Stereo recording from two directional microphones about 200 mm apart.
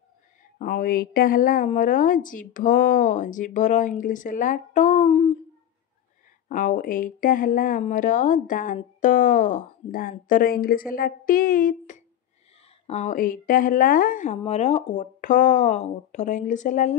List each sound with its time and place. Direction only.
0.6 s a woman's voice: 45° left (ahead or behind)
6.5 s a woman's voice: 40° left (ahead or behind)